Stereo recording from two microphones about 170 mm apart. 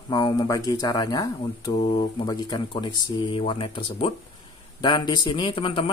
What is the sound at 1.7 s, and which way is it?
Speech, 35° left (ahead or behind).